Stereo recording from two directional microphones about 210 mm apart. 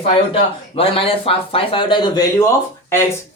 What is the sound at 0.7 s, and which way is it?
Speech, 25° left (ahead or behind).